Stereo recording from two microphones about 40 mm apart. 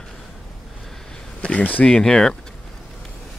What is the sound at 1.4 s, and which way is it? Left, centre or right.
Speech, left.